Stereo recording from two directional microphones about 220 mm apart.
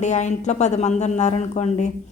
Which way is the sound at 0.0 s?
35° left (ahead or behind).